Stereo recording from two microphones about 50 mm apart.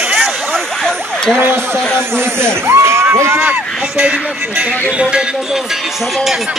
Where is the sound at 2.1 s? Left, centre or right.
Right.